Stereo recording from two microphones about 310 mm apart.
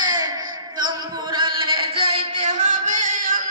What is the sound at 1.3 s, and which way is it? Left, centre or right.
Music, centre.